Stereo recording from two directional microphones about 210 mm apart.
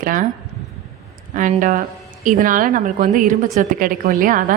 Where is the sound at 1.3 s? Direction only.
40° right (ahead or behind).